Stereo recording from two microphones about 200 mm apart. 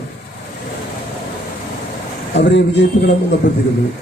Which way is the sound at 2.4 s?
60° left (ahead or behind).